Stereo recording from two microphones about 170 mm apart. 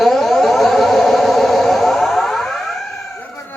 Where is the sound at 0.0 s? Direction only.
Centre (ahead or behind).